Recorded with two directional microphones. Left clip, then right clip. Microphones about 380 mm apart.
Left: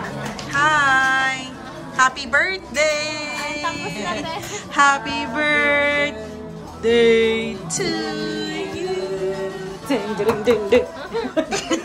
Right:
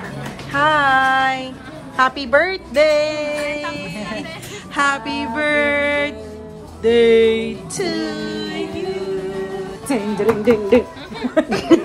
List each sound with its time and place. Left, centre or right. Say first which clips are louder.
0.5 s music: right 2 dB; centre
2.0 s a woman's voice: right 2 dB; centre
10.1 s speech: right 3 dB; centre
11.3 s laughter: right 9 dB; centre